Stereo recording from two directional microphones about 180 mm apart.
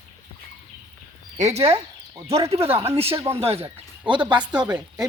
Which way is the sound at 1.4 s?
35° right (ahead or behind).